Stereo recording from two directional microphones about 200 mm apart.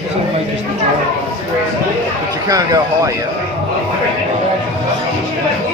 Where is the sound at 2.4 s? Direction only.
15° right (ahead or behind).